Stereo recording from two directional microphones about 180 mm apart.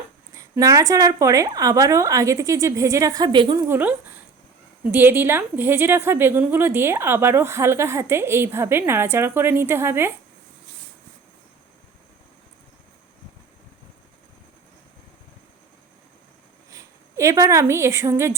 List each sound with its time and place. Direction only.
0.3 s a woman's voice: 15° right (ahead or behind)
3.8 s a woman's voice: 10° right (ahead or behind)
16.7 s a woman's voice: 15° right (ahead or behind)